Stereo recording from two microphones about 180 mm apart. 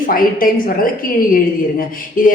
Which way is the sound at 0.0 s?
50° left (ahead or behind).